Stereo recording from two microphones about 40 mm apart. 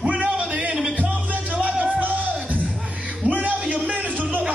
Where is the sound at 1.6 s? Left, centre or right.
Right.